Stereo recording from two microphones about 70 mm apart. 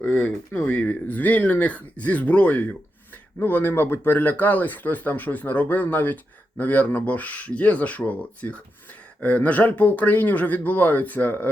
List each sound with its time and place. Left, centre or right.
0.0 s speech: centre